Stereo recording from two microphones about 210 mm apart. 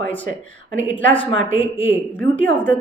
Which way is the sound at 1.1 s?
25° left (ahead or behind).